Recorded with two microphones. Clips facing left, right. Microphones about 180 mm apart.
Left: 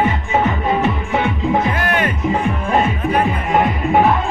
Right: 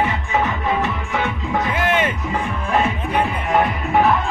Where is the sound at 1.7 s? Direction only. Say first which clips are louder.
Even; 20° right (ahead or behind).